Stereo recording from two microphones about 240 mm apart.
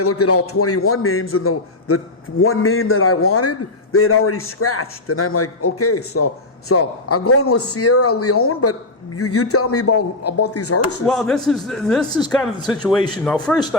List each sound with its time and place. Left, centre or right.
0.0 s a man's voice: left
11.0 s speech: centre
12.2 s speech: centre
13.2 s speech: centre